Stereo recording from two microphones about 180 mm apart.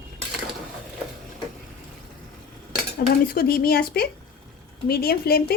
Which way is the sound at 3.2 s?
55° left (ahead or behind).